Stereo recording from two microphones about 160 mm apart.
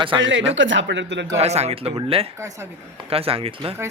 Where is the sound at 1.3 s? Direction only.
40° right (ahead or behind).